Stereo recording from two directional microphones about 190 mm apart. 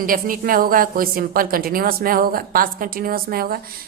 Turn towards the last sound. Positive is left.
turn(degrees=-50)  # may be behind; listen again after turning